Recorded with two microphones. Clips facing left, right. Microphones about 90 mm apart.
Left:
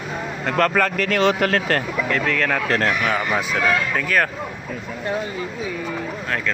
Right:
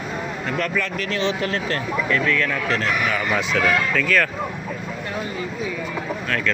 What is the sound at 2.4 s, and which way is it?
Speech, 50° left (ahead or behind).